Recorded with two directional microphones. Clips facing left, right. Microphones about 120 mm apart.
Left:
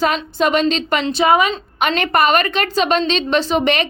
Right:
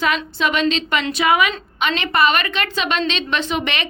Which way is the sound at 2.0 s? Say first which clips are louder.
Left 3 dB; 45° left (ahead or behind).